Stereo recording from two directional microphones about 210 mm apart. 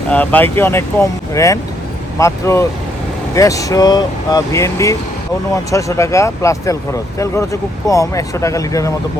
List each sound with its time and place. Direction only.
0.1 s speech: 10° left (ahead or behind)